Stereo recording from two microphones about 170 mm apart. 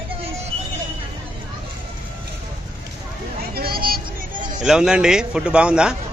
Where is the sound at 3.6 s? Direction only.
65° right (ahead or behind).